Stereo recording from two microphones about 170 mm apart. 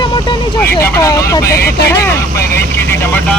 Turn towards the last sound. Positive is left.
turn(degrees=10)  # may be behind; listen again after turning